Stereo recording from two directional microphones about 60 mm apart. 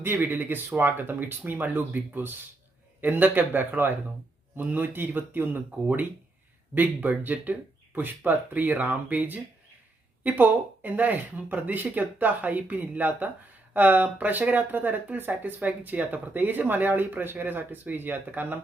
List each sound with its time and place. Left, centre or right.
0.0 s speech: right
6.7 s speech: right